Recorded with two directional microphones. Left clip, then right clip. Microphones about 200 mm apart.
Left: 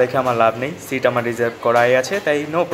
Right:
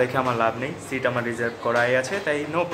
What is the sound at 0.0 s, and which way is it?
Speech, 15° left (ahead or behind).